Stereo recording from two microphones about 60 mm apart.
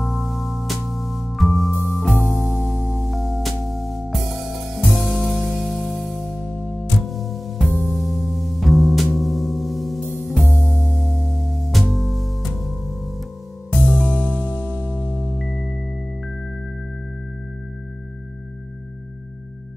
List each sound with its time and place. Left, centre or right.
0.0 s music: centre
6.5 s music: left
7.1 s music: centre
10.5 s music: left
10.8 s music: centre
13.7 s music: left